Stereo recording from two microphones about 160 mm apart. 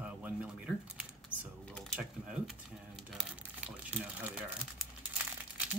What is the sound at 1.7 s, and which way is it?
Speech, centre (ahead or behind).